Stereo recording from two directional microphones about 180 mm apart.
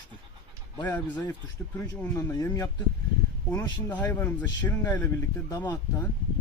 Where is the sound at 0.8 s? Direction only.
10° left (ahead or behind).